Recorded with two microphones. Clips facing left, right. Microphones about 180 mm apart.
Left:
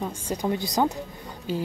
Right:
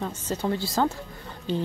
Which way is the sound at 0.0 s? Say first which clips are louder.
Even; 15° left (ahead or behind).